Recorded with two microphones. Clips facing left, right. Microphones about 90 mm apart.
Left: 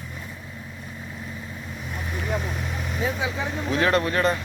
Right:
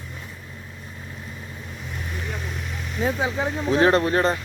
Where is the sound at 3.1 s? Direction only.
35° right (ahead or behind).